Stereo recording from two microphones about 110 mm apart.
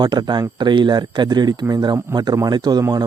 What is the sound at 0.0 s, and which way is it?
A man's voice, 40° right (ahead or behind).